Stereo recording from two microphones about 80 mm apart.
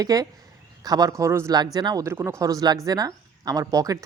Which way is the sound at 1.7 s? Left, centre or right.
Right.